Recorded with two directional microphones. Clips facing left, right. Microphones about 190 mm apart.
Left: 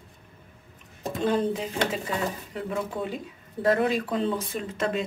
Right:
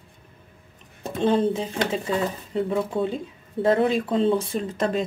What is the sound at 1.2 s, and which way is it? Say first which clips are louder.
Speech: right 4 dB; 25° right (ahead or behind).